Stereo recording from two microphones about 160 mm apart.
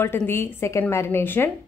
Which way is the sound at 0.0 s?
15° left (ahead or behind).